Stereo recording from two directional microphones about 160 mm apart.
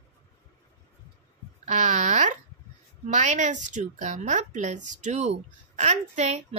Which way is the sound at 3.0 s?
50° right (ahead or behind).